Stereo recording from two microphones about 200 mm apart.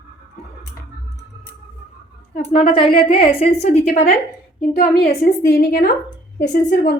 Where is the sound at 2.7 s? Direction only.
25° left (ahead or behind).